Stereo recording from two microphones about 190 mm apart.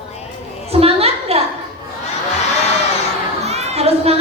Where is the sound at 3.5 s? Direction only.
35° right (ahead or behind).